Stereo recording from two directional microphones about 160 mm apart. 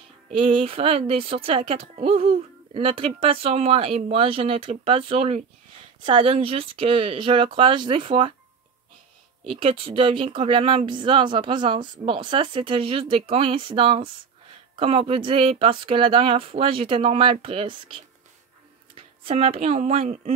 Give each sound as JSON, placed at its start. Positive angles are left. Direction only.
{"t": 0.4, "sound": "speech", "side_deg": -35}
{"t": 9.4, "sound": "speech", "side_deg": -35}
{"t": 19.2, "sound": "speech", "side_deg": -35}